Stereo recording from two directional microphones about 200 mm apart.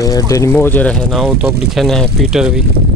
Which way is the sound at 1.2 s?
10° right (ahead or behind).